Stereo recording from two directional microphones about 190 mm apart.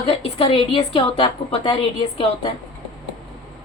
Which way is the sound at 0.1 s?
30° left (ahead or behind).